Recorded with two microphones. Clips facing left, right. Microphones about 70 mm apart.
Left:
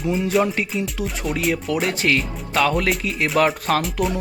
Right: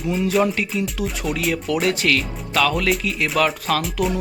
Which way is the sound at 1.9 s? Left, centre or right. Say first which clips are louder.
Even; left.